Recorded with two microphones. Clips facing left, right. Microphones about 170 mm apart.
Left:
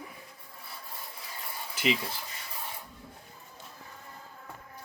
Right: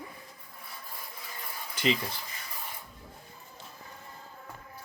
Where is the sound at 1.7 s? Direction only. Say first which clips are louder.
Right 1 dB; 5° left (ahead or behind).